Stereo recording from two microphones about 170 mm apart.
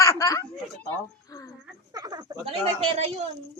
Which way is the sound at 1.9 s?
20° right (ahead or behind).